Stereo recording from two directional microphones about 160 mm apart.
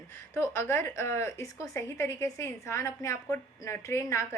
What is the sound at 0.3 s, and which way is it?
A woman's voice, 15° left (ahead or behind).